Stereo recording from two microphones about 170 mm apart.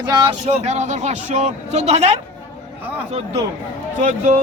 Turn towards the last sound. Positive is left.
turn(degrees=-45)  # may be behind; listen again after turning